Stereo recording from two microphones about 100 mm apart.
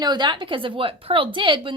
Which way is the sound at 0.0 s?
50° right (ahead or behind).